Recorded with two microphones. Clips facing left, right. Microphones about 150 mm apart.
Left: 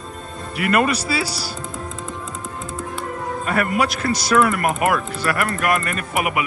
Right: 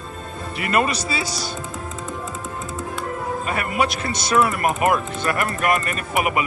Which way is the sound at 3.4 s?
60° left (ahead or behind).